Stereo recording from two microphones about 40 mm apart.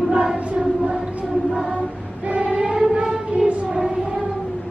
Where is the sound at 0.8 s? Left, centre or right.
Right.